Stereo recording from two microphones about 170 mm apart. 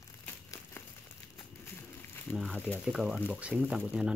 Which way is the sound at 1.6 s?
15° left (ahead or behind).